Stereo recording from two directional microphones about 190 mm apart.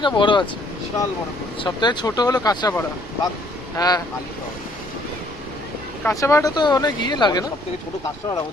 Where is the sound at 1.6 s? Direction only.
25° left (ahead or behind).